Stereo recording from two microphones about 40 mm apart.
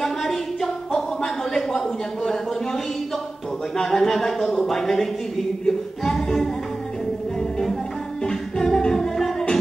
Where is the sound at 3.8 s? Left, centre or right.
Centre.